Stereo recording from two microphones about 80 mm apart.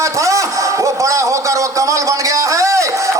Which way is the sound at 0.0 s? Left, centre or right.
Right.